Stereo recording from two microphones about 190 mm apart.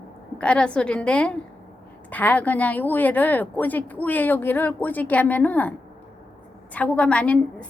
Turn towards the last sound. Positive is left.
turn(degrees=5)  # may be behind; listen again after turning